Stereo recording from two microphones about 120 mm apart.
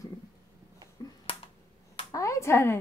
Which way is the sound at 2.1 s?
25° left (ahead or behind).